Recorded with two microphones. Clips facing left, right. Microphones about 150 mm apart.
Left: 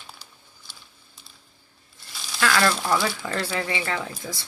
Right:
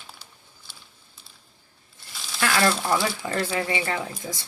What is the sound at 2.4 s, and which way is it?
Frying, 25° right (ahead or behind).